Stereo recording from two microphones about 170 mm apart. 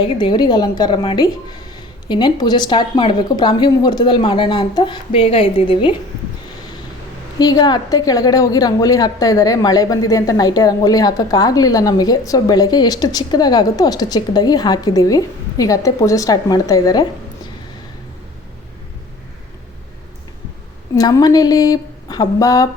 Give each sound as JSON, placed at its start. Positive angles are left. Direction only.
{"t": 0.0, "sound": "a woman's voice", "side_deg": 25}
{"t": 7.3, "sound": "a woman's voice", "side_deg": 25}
{"t": 20.9, "sound": "a woman's voice", "side_deg": 20}